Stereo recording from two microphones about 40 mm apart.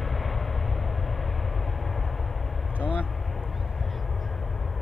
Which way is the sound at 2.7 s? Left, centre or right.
Right.